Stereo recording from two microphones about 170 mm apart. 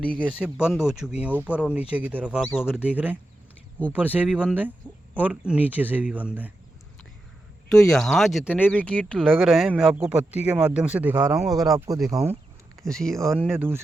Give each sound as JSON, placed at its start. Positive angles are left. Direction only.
{"t": 0.2, "sound": "speech", "side_deg": -10}
{"t": 7.7, "sound": "speech", "side_deg": 5}
{"t": 9.9, "sound": "speech", "side_deg": -10}
{"t": 11.2, "sound": "speech", "side_deg": -20}
{"t": 12.8, "sound": "speech", "side_deg": 5}
{"t": 13.1, "sound": "speech", "side_deg": -15}